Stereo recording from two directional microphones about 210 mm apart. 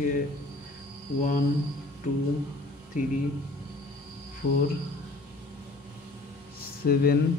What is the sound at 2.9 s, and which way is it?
Speech, 35° left (ahead or behind).